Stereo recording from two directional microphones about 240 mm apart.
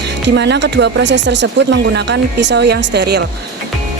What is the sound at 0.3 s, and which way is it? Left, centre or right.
Speech, right.